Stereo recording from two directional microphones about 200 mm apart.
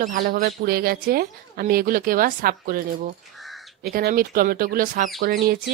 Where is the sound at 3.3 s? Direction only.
Centre (ahead or behind).